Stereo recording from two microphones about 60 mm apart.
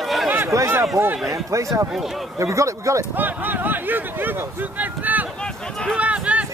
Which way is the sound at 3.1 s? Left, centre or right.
Right.